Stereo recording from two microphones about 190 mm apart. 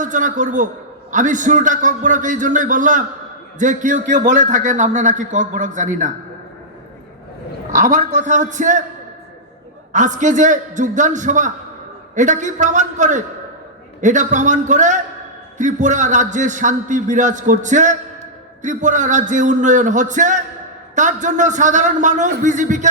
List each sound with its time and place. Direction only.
0.0 s a man's voice: 40° right (ahead or behind)
7.7 s a man's voice: 40° right (ahead or behind)
9.9 s a man's voice: 40° right (ahead or behind)